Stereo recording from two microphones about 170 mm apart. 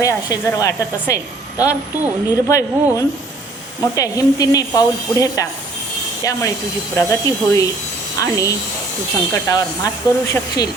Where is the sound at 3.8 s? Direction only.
20° left (ahead or behind).